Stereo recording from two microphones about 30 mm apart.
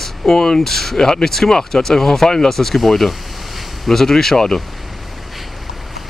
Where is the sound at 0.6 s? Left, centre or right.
Centre.